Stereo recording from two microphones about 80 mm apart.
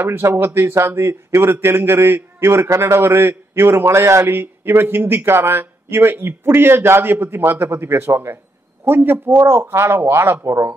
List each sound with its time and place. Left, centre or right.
0.0 s a man's voice: right